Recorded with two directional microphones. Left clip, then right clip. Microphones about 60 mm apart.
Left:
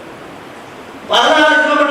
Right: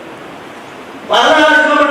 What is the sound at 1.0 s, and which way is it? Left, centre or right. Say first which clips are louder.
Speech: right 2 dB; right.